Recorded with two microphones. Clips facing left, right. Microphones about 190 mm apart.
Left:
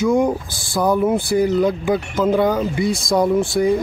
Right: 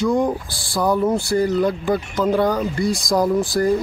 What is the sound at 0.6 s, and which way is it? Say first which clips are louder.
Speech: left 2 dB; 20° left (ahead or behind).